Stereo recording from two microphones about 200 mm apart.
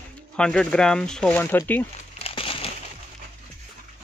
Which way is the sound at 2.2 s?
30° left (ahead or behind).